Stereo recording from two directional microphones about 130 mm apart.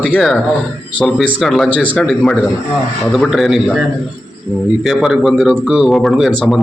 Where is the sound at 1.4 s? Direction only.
Centre (ahead or behind).